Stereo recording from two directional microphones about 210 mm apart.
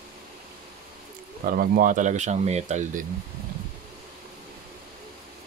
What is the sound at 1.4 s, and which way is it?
Speech, 45° right (ahead or behind).